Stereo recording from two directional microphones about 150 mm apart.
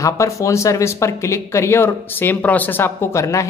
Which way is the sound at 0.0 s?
20° left (ahead or behind).